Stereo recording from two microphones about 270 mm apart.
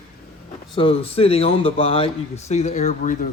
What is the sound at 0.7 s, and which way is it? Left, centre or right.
Speech, centre.